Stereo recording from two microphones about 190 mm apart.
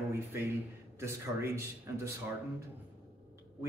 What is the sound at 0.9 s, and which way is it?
Speech, 15° right (ahead or behind).